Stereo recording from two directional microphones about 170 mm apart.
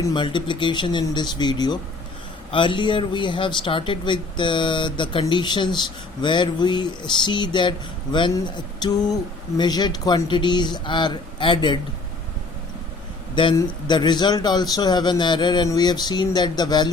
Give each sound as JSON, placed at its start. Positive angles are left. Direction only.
{"t": 0.0, "sound": "speech", "side_deg": 30}
{"t": 13.3, "sound": "speech", "side_deg": 30}